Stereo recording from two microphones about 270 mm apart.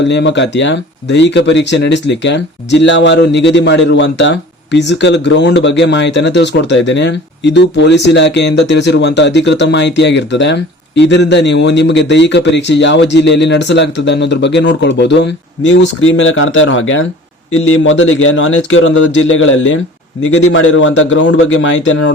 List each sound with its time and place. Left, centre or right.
0.0 s a man's voice: left